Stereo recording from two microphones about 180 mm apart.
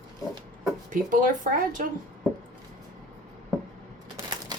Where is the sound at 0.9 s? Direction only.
45° right (ahead or behind).